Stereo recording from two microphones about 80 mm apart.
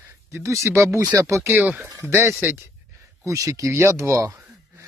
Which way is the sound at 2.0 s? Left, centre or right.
Right.